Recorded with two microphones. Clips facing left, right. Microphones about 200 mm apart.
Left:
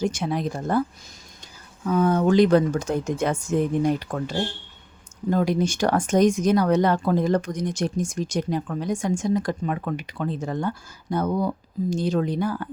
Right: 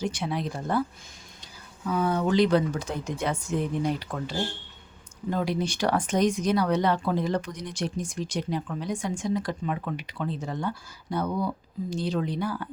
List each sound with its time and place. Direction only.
0.0 s speech: 45° left (ahead or behind)